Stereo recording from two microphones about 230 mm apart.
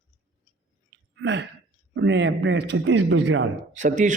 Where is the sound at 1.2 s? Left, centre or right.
Right.